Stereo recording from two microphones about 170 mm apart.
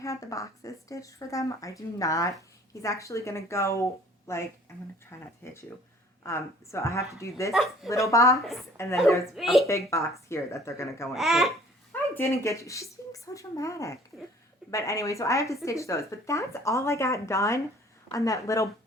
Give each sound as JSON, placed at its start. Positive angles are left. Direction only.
{"t": 0.0, "sound": "speech", "side_deg": 20}
{"t": 7.5, "sound": "speech", "side_deg": 0}
{"t": 7.9, "sound": "speech", "side_deg": 20}
{"t": 8.4, "sound": "speech", "side_deg": 0}
{"t": 9.0, "sound": "speech", "side_deg": 15}
{"t": 9.3, "sound": "speech", "side_deg": 0}
{"t": 9.6, "sound": "speech", "side_deg": 15}
{"t": 11.1, "sound": "speech", "side_deg": 0}
{"t": 11.9, "sound": "speech", "side_deg": 15}